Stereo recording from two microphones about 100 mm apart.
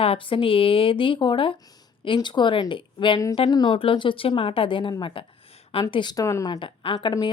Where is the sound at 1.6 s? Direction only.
40° left (ahead or behind).